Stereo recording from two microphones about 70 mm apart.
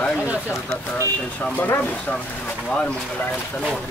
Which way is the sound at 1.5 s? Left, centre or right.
Left.